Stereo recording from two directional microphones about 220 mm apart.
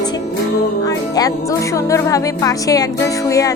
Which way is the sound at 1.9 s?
15° left (ahead or behind).